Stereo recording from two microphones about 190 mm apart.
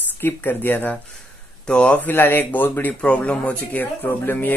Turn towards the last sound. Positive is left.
turn(degrees=10)  # may be behind; listen again after turning